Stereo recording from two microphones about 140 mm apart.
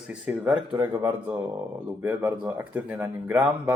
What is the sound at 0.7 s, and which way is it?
Speech, 20° right (ahead or behind).